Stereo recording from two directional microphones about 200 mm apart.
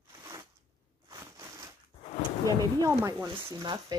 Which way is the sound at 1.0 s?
15° right (ahead or behind).